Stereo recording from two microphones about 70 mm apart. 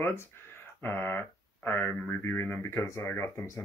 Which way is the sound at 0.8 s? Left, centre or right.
Left.